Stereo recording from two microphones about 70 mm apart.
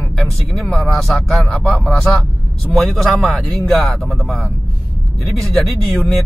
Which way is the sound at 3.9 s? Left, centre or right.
Centre.